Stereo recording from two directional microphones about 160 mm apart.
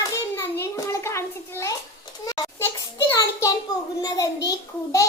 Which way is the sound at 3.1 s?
20° left (ahead or behind).